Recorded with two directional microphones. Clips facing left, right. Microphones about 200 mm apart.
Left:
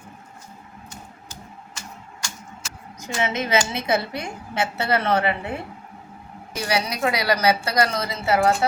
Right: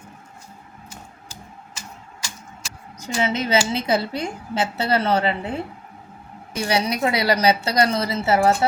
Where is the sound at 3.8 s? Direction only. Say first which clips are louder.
Right 2 dB; 30° right (ahead or behind).